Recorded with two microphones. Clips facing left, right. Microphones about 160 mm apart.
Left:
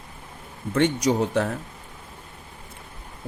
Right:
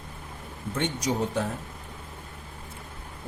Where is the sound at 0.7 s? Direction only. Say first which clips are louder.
Left 7 dB; 75° left (ahead or behind).